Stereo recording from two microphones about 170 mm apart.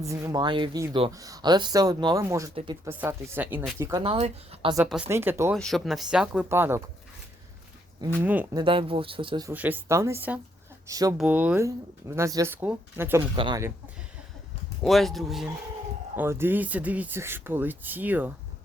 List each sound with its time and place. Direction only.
0.0 s speech: 20° right (ahead or behind)
4.0 s speech: 35° right (ahead or behind)
5.0 s speech: 15° right (ahead or behind)
5.5 s speech: centre (ahead or behind); by 6.8 s 15° right (ahead or behind)
8.2 s speech: 10° right (ahead or behind)
8.5 s speech: 30° right (ahead or behind)
9.5 s speech: 10° right (ahead or behind)
10.8 s speech: 20° right (ahead or behind)
11.2 s speech: 10° right (ahead or behind)
13.3 s speech: 30° right (ahead or behind)
14.8 s speech: centre (ahead or behind)
16.1 s speech: 15° right (ahead or behind)